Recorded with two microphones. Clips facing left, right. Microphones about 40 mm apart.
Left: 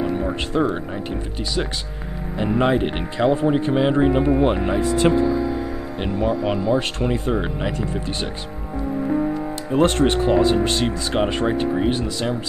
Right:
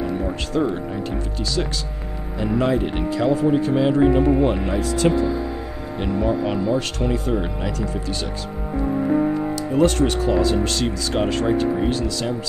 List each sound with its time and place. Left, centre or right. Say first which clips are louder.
0.2 s speech: left 1 dB; centre
2.4 s speech: left 1 dB; left
9.7 s speech: left 1 dB; left